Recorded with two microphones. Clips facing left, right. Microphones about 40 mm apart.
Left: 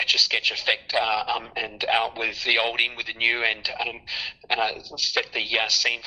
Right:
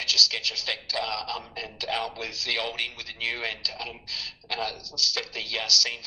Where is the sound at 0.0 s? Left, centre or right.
Left.